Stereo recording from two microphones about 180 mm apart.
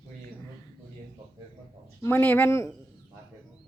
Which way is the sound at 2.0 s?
10° left (ahead or behind).